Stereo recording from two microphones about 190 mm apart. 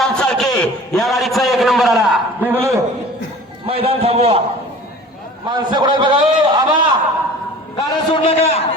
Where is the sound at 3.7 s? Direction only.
30° right (ahead or behind).